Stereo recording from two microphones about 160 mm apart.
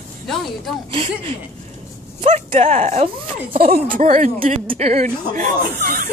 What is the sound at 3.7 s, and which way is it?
A woman's voice, 55° right (ahead or behind).